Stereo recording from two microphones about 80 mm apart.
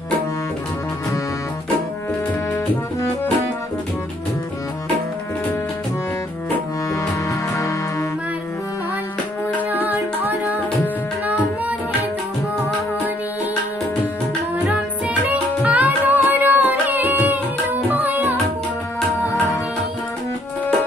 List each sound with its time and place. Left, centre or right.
6.9 s music: left
9.6 s music: right
14.6 s music: right